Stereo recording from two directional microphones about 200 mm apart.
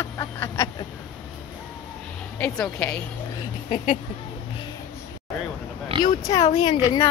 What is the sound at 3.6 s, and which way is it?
Speech, 35° left (ahead or behind).